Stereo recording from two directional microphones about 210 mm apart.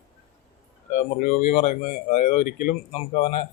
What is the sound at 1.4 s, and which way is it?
Speech, 35° left (ahead or behind).